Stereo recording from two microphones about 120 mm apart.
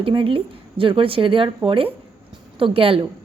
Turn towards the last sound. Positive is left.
turn(degrees=-50)  # may be behind; listen again after turning